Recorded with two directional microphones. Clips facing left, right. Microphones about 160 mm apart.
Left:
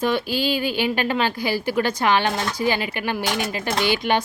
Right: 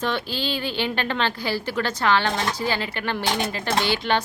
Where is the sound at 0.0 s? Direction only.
10° left (ahead or behind).